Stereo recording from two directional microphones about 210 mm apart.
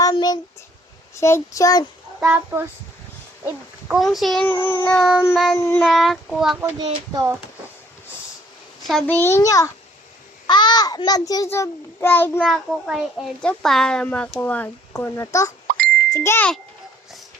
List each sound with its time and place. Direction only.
0.0 s a sound: 20° left (ahead or behind)
1.2 s a child's voice: 15° left (ahead or behind)
2.2 s a child's voice: 10° right (ahead or behind)
5.5 s a child's voice: 15° left (ahead or behind)
5.8 s a child's voice: centre (ahead or behind)
6.6 s a child's voice: 15° right (ahead or behind)
8.9 s a child's voice: 5° left (ahead or behind)